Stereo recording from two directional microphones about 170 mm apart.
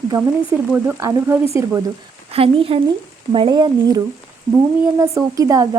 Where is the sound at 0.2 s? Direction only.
10° right (ahead or behind).